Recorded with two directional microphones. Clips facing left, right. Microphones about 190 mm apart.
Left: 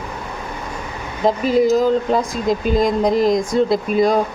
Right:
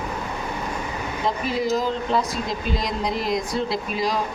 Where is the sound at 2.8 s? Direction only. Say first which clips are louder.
Left 11 dB; 45° left (ahead or behind).